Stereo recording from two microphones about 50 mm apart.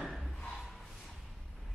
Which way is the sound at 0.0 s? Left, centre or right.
Centre.